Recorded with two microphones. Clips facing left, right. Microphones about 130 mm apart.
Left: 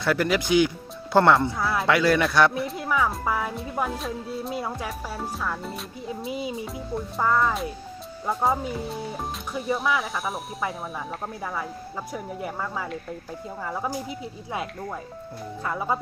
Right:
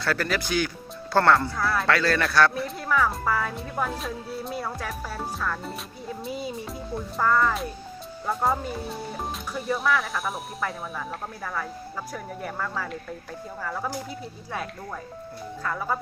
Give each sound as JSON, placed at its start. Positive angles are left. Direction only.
{"t": 0.0, "sound": "speech", "side_deg": 15}
{"t": 3.9, "sound": "speech", "side_deg": 0}
{"t": 4.5, "sound": "speech", "side_deg": 20}
{"t": 11.4, "sound": "speech", "side_deg": 15}